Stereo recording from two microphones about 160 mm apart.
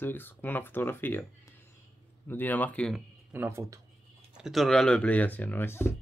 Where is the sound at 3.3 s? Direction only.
15° right (ahead or behind).